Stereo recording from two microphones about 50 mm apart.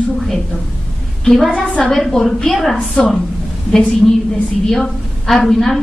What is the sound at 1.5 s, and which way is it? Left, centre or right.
Speech, centre.